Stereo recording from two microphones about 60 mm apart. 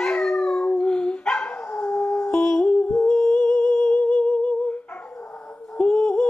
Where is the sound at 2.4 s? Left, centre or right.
Centre.